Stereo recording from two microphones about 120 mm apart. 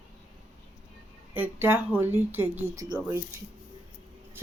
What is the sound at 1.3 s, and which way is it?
Speech, 15° right (ahead or behind).